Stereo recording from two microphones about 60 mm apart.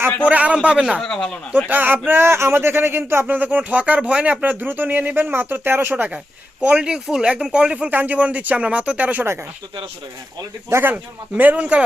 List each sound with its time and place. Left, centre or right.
0.3 s speech: right
0.9 s speech: centre
1.7 s speech: right
6.7 s speech: centre
7.9 s speech: right
10.7 s speech: right
10.9 s speech: right